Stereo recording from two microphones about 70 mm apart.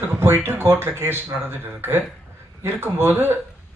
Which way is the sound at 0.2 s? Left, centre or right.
Right.